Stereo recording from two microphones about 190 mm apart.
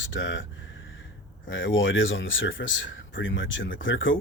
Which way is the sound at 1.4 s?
90° left.